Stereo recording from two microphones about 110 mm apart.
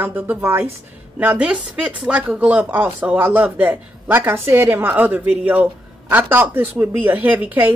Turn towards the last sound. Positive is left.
turn(degrees=-15)  # may be behind; listen again after turning